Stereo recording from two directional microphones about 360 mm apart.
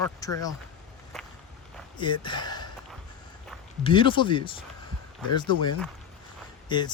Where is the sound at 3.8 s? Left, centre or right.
Centre.